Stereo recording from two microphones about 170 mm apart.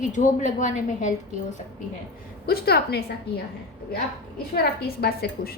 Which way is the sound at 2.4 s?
65° left (ahead or behind).